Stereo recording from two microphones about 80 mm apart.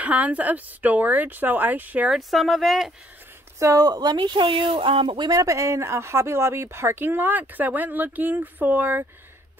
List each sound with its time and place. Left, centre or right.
0.0 s speech: centre
2.0 s speech: centre
3.5 s speech: right
3.8 s speech: right
5.3 s speech: right